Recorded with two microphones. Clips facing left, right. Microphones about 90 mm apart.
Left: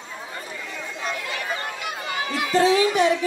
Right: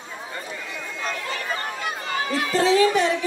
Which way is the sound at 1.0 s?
35° right (ahead or behind).